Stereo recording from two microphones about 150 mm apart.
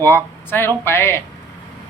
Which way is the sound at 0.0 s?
15° left (ahead or behind).